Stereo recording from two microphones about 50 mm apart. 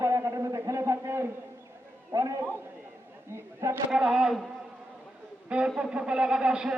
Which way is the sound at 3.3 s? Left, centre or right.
Right.